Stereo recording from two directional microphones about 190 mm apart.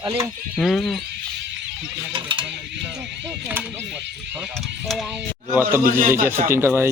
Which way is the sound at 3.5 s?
10° right (ahead or behind).